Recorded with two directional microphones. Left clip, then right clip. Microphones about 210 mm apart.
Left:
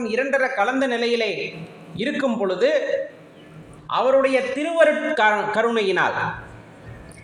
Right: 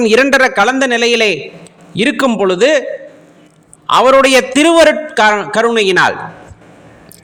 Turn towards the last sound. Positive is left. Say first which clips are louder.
# right 9 dB
turn(degrees=-40)  # may be behind; listen again after turning